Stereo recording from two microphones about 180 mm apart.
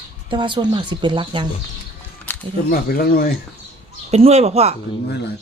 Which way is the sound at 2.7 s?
55° left (ahead or behind).